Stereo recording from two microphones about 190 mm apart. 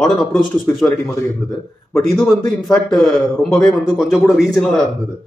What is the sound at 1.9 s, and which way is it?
Speech, 20° left (ahead or behind).